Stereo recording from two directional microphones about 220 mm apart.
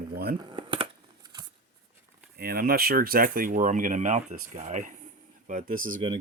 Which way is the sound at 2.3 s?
45° right (ahead or behind).